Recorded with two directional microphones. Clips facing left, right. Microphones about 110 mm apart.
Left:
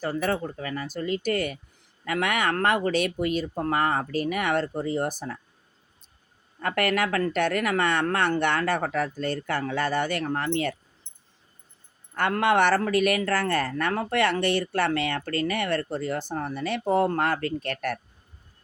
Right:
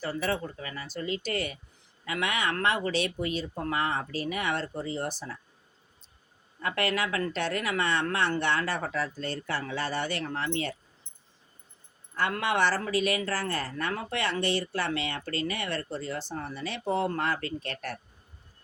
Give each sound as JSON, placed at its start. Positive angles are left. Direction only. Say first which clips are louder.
{"t": 0.0, "sound": "speech", "louder": "left 4 dB", "side_deg": 45}
{"t": 3.5, "sound": "speech", "louder": "left 5 dB", "side_deg": 45}
{"t": 6.6, "sound": "speech", "louder": "left 4 dB", "side_deg": 50}
{"t": 12.1, "sound": "speech", "louder": "left 6 dB", "side_deg": 55}